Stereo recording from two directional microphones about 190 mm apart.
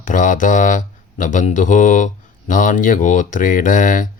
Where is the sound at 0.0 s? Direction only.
45° left (ahead or behind).